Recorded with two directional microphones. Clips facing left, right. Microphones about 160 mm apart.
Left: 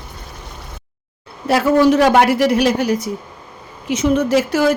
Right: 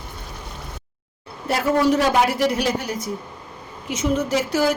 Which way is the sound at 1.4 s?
80° left.